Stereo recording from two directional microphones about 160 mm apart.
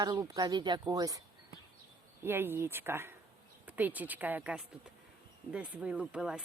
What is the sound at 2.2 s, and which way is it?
Speech, 15° right (ahead or behind).